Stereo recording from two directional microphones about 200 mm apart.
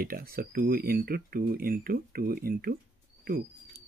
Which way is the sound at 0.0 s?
50° right (ahead or behind).